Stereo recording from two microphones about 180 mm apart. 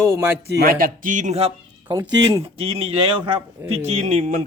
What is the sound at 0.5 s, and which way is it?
Speech, 55° right (ahead or behind).